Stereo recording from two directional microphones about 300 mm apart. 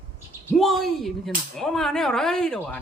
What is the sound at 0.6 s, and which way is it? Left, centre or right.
Speech, centre.